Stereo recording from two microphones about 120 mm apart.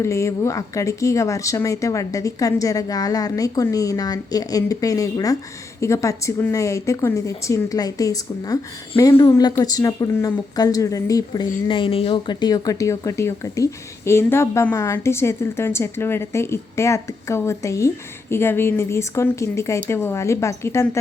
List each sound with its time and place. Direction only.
0.0 s a woman's voice: 25° left (ahead or behind)
11.7 s speech: 50° left (ahead or behind); by 21.0 s 25° left (ahead or behind)